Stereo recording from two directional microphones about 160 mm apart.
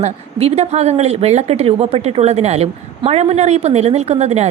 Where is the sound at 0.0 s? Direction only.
40° right (ahead or behind).